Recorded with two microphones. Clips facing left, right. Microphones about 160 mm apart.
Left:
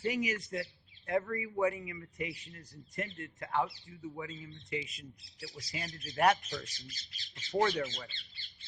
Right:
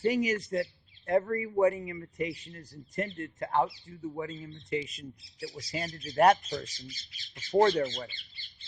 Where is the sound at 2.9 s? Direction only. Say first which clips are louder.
Right 6 dB; 40° right (ahead or behind).